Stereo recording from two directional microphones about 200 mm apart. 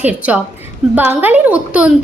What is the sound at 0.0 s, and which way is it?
A woman's voice, 5° right (ahead or behind).